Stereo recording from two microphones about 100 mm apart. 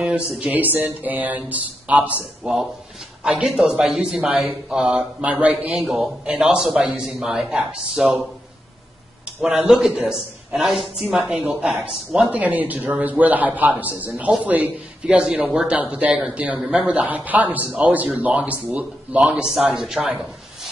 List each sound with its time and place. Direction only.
0.5 s a man's voice: 15° right (ahead or behind)
9.4 s a man's voice: 10° right (ahead or behind)